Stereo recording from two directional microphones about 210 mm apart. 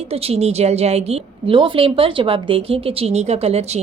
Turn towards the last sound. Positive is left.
turn(degrees=-30)  # may be behind; listen again after turning